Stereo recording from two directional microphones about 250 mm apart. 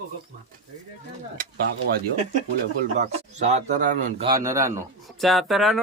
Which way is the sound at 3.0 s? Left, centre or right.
Right.